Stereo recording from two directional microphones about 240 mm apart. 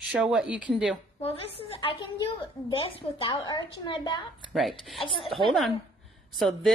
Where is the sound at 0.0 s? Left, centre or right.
Centre.